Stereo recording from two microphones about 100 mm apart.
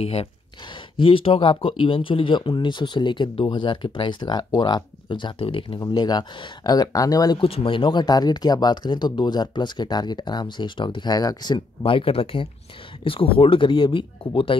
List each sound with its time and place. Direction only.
0.0 s speech: 90° left
0.9 s speech: 65° left (ahead or behind)
5.8 s speech: 45° left (ahead or behind)
7.3 s speech: 65° left (ahead or behind); by 11.6 s 45° left (ahead or behind)
11.8 s speech: 65° left (ahead or behind)